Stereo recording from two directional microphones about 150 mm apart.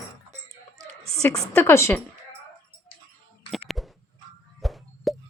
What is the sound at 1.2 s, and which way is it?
Speech, 20° left (ahead or behind).